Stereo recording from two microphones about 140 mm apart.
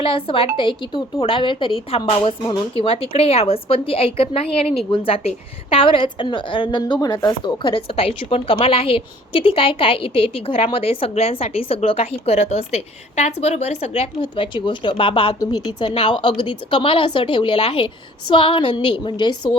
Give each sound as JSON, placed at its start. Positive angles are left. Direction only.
{"t": 0.0, "sound": "a woman's voice", "side_deg": 40}